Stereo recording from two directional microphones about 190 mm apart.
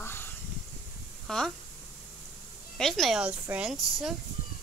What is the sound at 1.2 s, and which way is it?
Speech, 5° left (ahead or behind).